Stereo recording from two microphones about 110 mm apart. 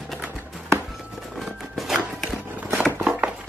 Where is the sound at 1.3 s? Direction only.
Centre (ahead or behind).